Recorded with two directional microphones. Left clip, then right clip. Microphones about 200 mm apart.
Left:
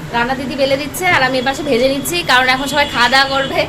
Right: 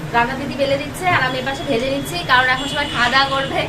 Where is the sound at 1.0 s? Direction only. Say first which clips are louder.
Left 6 dB; 50° left (ahead or behind).